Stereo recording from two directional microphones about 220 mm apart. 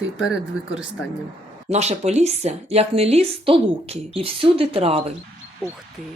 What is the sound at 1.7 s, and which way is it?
Speech, 30° right (ahead or behind).